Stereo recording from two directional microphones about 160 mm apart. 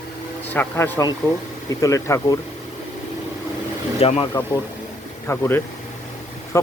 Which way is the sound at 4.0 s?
40° left (ahead or behind).